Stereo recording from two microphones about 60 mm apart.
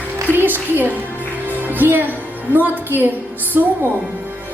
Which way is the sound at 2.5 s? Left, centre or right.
Right.